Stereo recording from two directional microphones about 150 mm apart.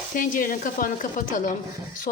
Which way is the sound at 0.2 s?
65° left (ahead or behind).